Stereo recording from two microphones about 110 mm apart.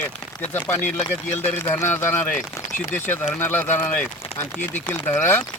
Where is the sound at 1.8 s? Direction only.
20° left (ahead or behind).